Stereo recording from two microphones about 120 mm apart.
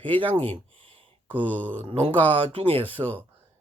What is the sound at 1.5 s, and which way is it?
Speech, 15° left (ahead or behind).